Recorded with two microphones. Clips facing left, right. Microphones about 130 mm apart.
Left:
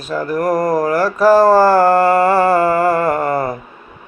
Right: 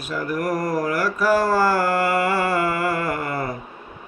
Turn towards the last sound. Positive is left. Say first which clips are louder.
# left 9 dB
turn(degrees=35)  # may be behind; listen again after turning